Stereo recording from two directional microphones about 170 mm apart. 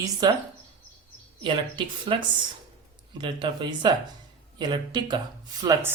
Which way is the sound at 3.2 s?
25° right (ahead or behind).